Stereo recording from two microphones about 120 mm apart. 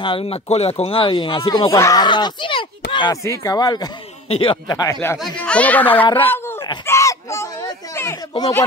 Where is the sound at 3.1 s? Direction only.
25° left (ahead or behind).